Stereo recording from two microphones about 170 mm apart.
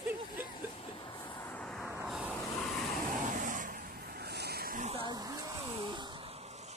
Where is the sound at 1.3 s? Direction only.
15° left (ahead or behind).